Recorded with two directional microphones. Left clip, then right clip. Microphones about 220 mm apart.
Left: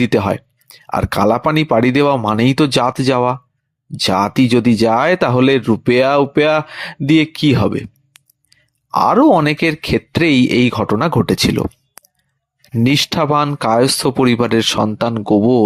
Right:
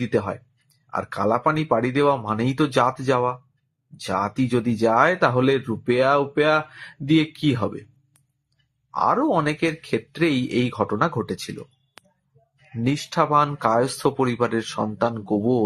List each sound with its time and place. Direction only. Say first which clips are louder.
0.0 s speech: left 9 dB; 40° left (ahead or behind)
9.0 s speech: left 9 dB; 40° left (ahead or behind)
12.8 s speech: left 7 dB; 40° left (ahead or behind)